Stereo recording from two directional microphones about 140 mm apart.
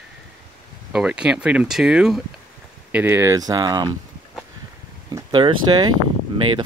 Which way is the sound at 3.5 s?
30° right (ahead or behind).